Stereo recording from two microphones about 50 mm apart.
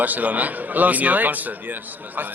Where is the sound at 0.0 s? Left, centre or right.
Right.